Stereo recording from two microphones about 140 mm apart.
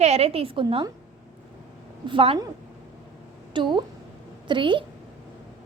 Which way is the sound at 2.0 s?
40° right (ahead or behind).